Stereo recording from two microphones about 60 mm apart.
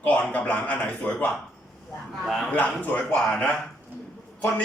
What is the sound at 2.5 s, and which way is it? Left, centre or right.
Speech, left.